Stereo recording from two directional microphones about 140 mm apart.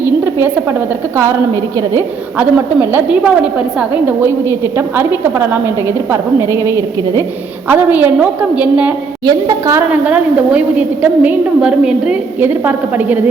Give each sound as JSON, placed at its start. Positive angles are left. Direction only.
{"t": 0.3, "sound": "a woman's voice", "side_deg": -15}
{"t": 9.2, "sound": "a woman's voice", "side_deg": -25}
{"t": 9.9, "sound": "a woman's voice", "side_deg": -10}